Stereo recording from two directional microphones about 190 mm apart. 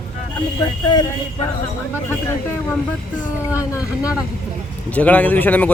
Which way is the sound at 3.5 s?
15° left (ahead or behind).